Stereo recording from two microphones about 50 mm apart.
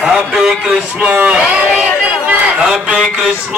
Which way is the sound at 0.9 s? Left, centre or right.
Right.